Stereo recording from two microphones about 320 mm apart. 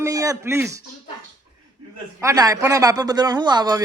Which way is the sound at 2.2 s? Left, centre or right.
Centre.